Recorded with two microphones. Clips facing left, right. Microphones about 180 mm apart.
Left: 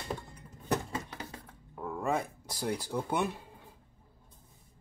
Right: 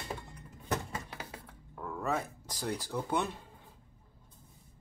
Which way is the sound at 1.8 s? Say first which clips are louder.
Left 2 dB; 10° left (ahead or behind).